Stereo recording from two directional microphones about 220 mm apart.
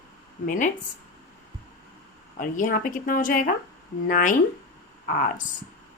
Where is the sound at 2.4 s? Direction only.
40° left (ahead or behind).